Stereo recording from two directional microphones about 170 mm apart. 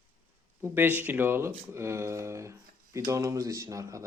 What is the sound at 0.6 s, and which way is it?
A man's voice, 10° right (ahead or behind).